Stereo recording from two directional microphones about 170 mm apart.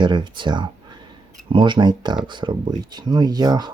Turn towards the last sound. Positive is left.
turn(degrees=-25)  # may be behind; listen again after turning